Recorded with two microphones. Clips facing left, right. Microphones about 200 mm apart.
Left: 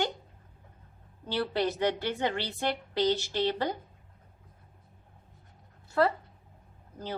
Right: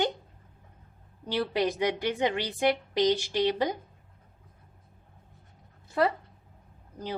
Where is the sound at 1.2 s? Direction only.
15° right (ahead or behind).